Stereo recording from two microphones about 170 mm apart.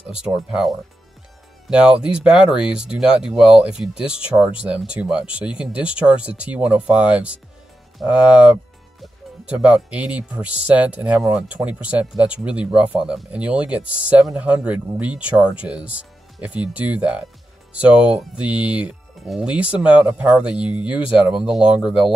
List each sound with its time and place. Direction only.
0.0 s speech: 5° right (ahead or behind)